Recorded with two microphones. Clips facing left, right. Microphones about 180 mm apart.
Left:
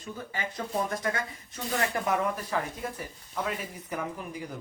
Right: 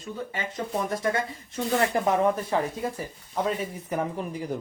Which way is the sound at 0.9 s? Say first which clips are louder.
Right 5 dB; 25° right (ahead or behind).